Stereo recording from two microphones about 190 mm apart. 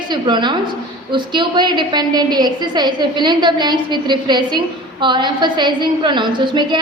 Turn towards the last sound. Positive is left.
turn(degrees=-25)  # may be behind; listen again after turning